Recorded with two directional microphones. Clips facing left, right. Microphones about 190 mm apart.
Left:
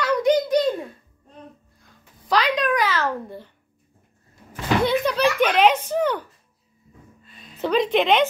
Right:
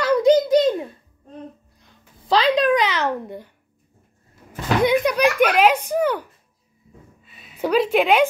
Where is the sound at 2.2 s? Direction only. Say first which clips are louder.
Right 4 dB; 30° right (ahead or behind).